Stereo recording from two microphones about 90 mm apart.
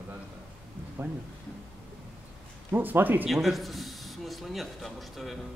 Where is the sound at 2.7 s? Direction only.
20° right (ahead or behind).